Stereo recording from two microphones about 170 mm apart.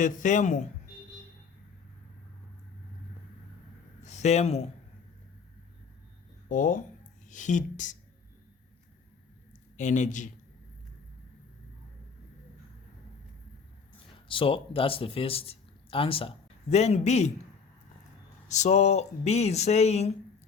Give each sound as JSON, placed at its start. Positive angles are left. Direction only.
{"t": 0.0, "sound": "speech", "side_deg": 50}
{"t": 4.0, "sound": "speech", "side_deg": 45}
{"t": 6.5, "sound": "speech", "side_deg": 50}
{"t": 9.7, "sound": "speech", "side_deg": 45}
{"t": 14.3, "sound": "speech", "side_deg": 30}
{"t": 18.4, "sound": "speech", "side_deg": 45}